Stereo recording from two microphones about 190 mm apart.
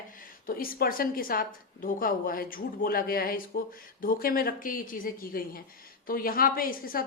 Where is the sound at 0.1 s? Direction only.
50° left (ahead or behind).